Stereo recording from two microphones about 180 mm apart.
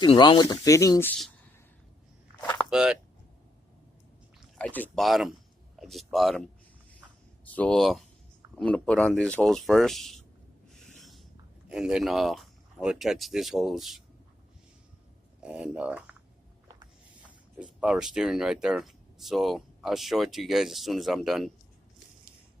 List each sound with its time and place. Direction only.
0.0 s speech: 25° left (ahead or behind)
2.4 s a sound: 5° left (ahead or behind)
2.6 s speech: 5° right (ahead or behind)
4.4 s speech: 5° left (ahead or behind)
10.8 s a sound: centre (ahead or behind)
11.7 s speech: 5° right (ahead or behind)
15.4 s speech: 5° right (ahead or behind)
17.6 s speech: 5° right (ahead or behind)